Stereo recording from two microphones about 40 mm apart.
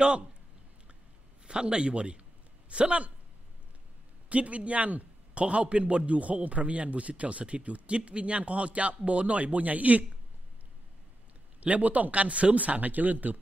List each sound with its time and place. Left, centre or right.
1.5 s speech: right
4.3 s a man's voice: right
11.6 s a man's voice: right